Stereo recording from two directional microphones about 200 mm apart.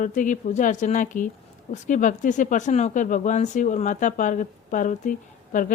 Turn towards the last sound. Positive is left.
turn(degrees=40)  # may be behind; listen again after turning